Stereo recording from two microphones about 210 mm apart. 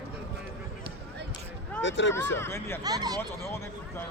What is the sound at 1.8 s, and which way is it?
Speech, 60° left (ahead or behind).